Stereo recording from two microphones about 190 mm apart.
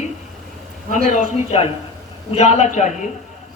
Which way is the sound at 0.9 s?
35° left (ahead or behind).